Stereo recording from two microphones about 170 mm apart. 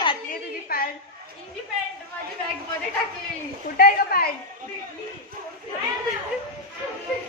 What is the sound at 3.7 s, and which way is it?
Speech, 60° left (ahead or behind).